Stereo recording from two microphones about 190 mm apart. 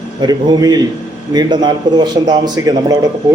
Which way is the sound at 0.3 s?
20° right (ahead or behind).